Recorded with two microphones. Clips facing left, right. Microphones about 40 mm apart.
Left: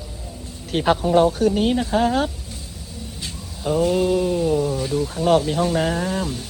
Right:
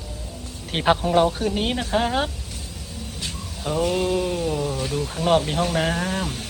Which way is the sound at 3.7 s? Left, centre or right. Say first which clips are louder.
Left 3 dB; right.